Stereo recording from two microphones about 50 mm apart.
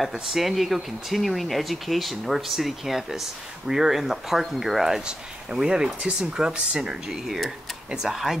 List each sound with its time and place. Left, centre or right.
0.1 s speech: centre